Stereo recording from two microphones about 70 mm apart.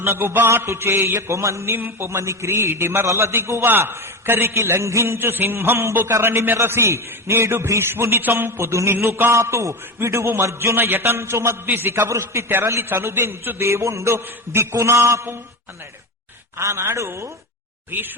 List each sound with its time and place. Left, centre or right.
0.0 s a man's voice: right
9.3 s a man's voice: right
16.6 s a man's voice: right
17.9 s speech: right